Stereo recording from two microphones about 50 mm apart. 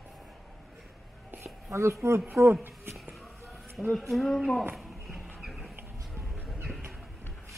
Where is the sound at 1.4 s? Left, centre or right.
Right.